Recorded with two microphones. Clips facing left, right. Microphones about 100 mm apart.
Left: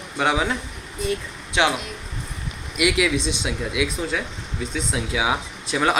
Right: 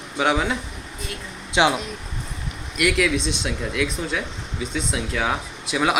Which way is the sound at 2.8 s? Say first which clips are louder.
Even; 5° left (ahead or behind).